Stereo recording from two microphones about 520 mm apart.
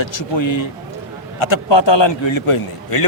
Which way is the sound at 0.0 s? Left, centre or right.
Left.